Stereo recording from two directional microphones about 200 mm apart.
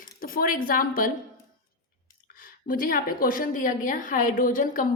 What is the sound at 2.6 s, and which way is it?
A woman's voice, 45° left (ahead or behind).